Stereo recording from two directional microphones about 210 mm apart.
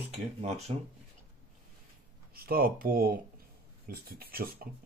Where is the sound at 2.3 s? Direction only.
45° right (ahead or behind).